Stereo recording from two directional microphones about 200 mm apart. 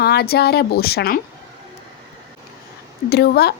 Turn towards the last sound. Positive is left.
turn(degrees=55)  # may be behind; listen again after turning